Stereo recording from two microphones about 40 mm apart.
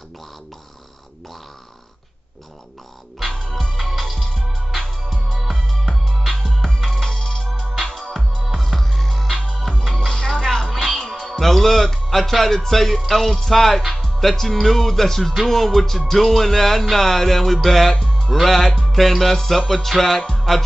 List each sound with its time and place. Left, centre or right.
3.3 s music: centre
5.5 s music: centre
6.4 s music: centre
10.7 s music: centre
11.2 s speech: centre
15.4 s music: centre
16.9 s speech: centre